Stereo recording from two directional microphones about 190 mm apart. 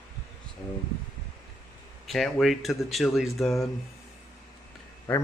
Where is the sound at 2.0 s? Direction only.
Centre (ahead or behind).